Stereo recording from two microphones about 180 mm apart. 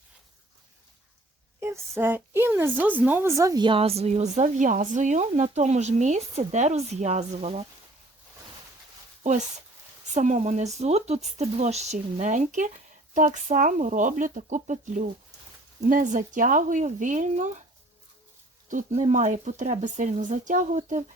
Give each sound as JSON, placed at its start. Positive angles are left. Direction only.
{"t": 1.6, "sound": "speech", "side_deg": -15}
{"t": 10.1, "sound": "speech", "side_deg": -40}
{"t": 18.7, "sound": "speech", "side_deg": -45}